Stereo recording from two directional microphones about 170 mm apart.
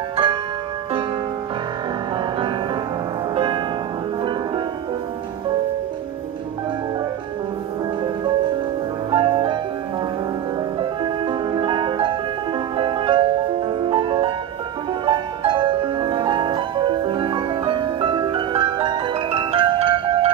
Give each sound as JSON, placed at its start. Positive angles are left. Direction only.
{"t": 0.1, "sound": "music", "side_deg": -30}
{"t": 3.3, "sound": "music", "side_deg": -30}
{"t": 9.1, "sound": "music", "side_deg": -30}
{"t": 10.8, "sound": "music", "side_deg": -30}